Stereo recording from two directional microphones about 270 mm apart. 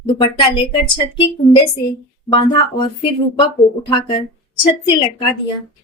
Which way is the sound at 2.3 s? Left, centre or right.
Centre.